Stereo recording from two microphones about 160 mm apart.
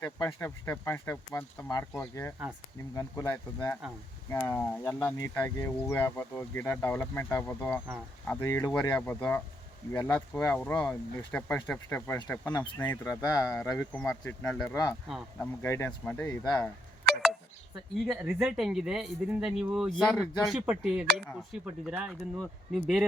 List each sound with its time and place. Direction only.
0.0 s speech: 20° left (ahead or behind)
13.7 s speech: 10° left (ahead or behind)
15.6 s speech: 15° left (ahead or behind)
18.0 s speech: 5° right (ahead or behind)